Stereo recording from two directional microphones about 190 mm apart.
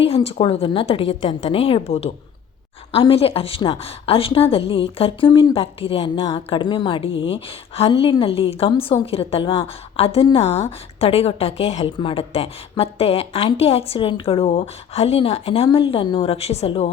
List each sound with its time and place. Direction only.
0.0 s a woman's voice: 30° left (ahead or behind)